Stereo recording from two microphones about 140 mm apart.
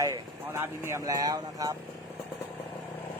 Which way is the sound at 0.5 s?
20° right (ahead or behind).